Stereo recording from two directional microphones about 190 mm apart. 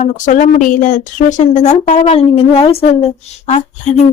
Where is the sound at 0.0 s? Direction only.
40° left (ahead or behind).